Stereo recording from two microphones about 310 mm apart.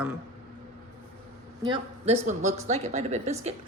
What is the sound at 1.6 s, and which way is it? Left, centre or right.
A woman's voice, centre.